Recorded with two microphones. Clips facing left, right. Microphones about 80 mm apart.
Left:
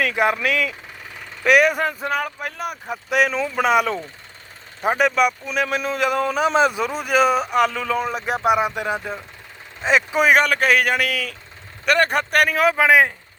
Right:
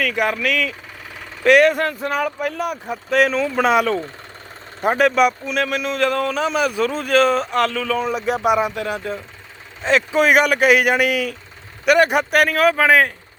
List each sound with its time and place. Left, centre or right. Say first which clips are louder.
0.0 s speech: left 1 dB; left
1.5 s speech: right 3 dB; centre
5.6 s speech: right 1 dB; centre
10.3 s a man's voice: right 4 dB; centre
12.5 s speech: even; centre